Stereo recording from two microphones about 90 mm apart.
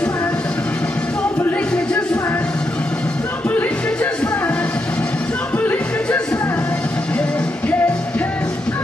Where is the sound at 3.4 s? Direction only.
20° left (ahead or behind).